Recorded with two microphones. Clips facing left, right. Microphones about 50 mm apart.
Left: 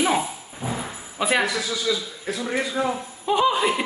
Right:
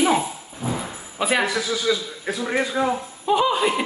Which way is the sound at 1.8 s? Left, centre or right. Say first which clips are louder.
Right 2 dB; right.